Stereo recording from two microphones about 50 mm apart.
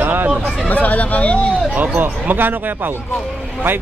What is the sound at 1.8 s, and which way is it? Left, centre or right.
Speech, right.